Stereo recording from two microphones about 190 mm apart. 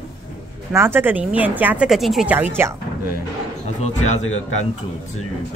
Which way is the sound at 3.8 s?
35° left (ahead or behind).